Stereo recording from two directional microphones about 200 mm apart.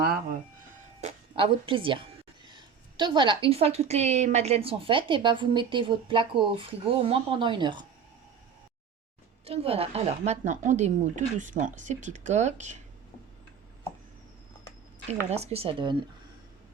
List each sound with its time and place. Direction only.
1.0 s a woman's voice: 25° right (ahead or behind)
9.4 s speech: 30° right (ahead or behind)
15.0 s a woman's voice: 30° right (ahead or behind)